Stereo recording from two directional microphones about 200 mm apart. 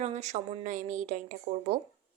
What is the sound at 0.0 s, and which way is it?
Speech, 35° right (ahead or behind).